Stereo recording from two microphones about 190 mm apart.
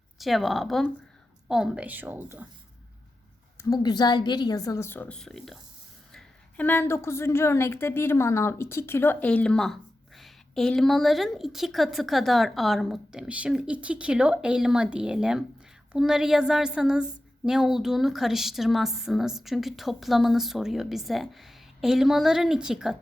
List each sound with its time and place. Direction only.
0.2 s a woman's voice: centre (ahead or behind)
3.6 s a woman's voice: 20° left (ahead or behind); by 23.0 s 5° right (ahead or behind)